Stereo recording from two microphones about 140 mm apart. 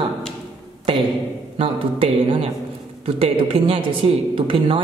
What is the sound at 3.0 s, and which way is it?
A man's voice, 45° right (ahead or behind).